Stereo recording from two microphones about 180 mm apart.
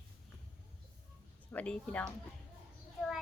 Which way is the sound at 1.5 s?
5° left (ahead or behind).